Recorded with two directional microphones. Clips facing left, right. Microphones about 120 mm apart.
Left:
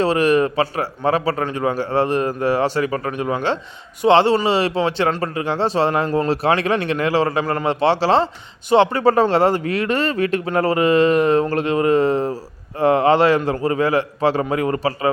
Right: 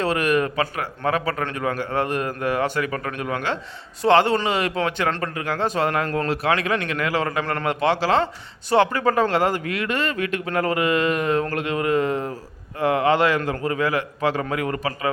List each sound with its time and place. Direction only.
0.0 s a man's voice: 30° left (ahead or behind)